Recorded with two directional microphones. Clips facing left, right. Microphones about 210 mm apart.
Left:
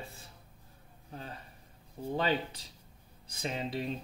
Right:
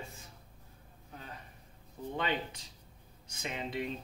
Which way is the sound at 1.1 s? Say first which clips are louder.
Left 4 dB; 35° left (ahead or behind).